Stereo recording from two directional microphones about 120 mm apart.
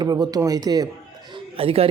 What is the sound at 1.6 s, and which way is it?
Speech, 50° right (ahead or behind).